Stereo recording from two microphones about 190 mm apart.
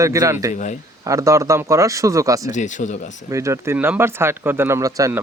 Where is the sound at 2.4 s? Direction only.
40° left (ahead or behind).